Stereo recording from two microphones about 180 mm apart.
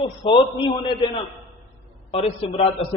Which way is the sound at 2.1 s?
30° left (ahead or behind).